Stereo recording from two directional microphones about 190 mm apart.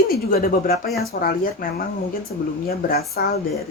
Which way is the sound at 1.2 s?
50° left (ahead or behind).